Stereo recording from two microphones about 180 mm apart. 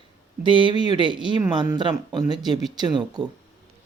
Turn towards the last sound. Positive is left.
turn(degrees=-25)  # may be behind; listen again after turning